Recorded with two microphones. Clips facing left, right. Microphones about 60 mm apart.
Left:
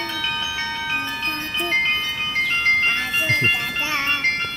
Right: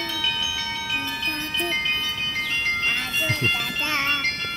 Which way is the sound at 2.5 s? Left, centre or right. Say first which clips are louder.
Left 6 dB; left.